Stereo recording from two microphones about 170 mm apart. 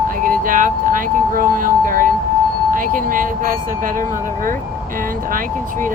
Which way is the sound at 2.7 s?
50° right (ahead or behind).